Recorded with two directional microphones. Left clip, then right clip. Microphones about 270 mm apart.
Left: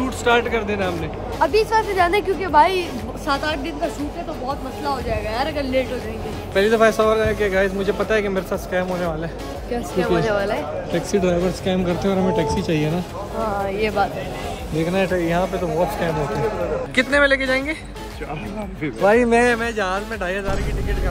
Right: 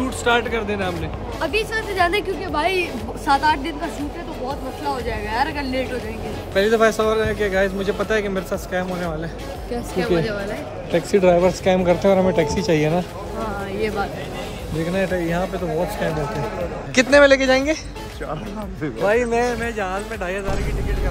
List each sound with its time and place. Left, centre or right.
0.0 s a man's voice: centre
5.3 s a man's voice: centre
16.9 s speech: centre
19.0 s speech: left
19.6 s a man's voice: centre